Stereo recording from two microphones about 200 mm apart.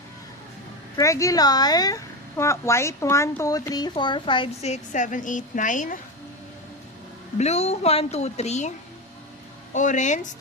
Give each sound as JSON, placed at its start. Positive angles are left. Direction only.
{"t": 0.9, "sound": "speech", "side_deg": 15}
{"t": 7.3, "sound": "a woman's voice", "side_deg": 35}
{"t": 9.7, "sound": "a woman's voice", "side_deg": 40}